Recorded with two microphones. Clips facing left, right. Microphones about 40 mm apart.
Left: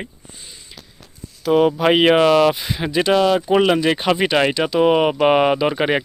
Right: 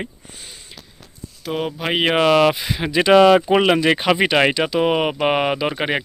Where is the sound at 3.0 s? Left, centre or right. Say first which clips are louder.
Right 4 dB; right.